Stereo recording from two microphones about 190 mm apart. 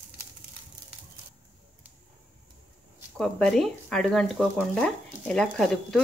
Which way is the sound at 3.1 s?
Centre (ahead or behind).